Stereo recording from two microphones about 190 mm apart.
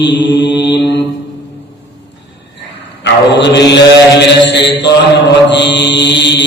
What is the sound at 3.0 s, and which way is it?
Mantra, 65° left (ahead or behind).